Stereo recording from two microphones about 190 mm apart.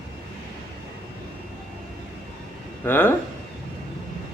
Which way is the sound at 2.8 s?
10° left (ahead or behind).